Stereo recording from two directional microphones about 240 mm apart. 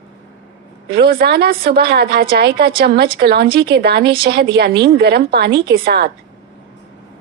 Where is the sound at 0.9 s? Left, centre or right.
Right.